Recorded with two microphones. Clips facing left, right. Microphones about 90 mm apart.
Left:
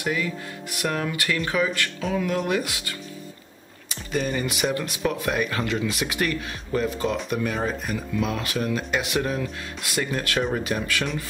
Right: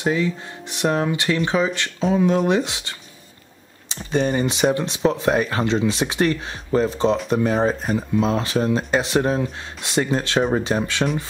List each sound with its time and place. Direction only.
0.0 s speech: 25° right (ahead or behind)
3.9 s speech: 30° right (ahead or behind)